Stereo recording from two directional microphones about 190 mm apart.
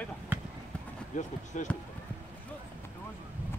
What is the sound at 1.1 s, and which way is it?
Speech, 40° left (ahead or behind).